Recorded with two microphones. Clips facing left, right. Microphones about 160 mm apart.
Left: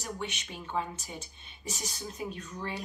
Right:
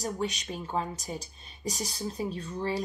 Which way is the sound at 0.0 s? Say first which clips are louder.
Right 6 dB; 35° right (ahead or behind).